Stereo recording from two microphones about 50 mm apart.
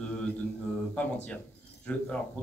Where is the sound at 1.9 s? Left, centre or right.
Left.